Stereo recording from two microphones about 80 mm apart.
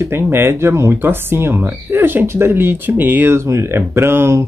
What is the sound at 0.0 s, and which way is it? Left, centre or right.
Speech, right.